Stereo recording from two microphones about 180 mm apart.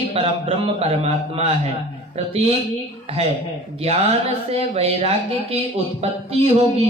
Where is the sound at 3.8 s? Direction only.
35° right (ahead or behind).